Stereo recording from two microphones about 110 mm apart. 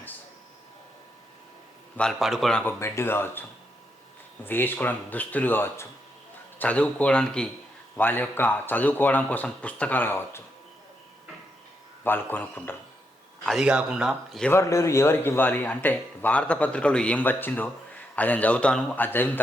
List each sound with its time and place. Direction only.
2.0 s a man's voice: centre (ahead or behind)
2.6 s speech: 25° left (ahead or behind)
4.4 s speech: 15° left (ahead or behind)
12.0 s speech: 20° left (ahead or behind)
13.4 s a man's voice: centre (ahead or behind)
14.5 s speech: 25° left (ahead or behind)